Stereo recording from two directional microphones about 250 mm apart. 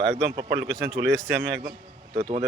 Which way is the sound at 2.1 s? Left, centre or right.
Right.